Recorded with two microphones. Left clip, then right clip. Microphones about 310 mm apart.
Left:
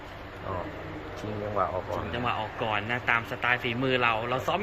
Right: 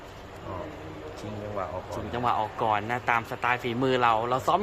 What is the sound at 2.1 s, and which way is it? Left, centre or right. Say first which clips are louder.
A man's voice: right 6 dB; centre.